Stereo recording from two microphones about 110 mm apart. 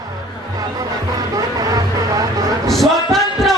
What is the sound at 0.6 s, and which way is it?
Music, 35° right (ahead or behind).